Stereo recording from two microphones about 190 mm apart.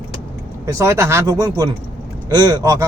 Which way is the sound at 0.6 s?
15° right (ahead or behind).